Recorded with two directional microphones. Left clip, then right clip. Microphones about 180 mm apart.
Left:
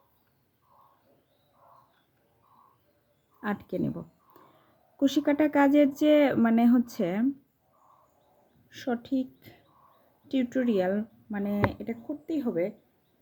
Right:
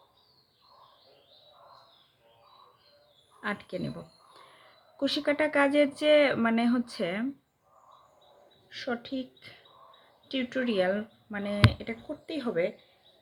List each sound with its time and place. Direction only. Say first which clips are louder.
3.4 s speech: left 2 dB; 50° left (ahead or behind)
4.9 s speech: left 2 dB; 45° left (ahead or behind)
8.7 s speech: left 3 dB; 55° left (ahead or behind)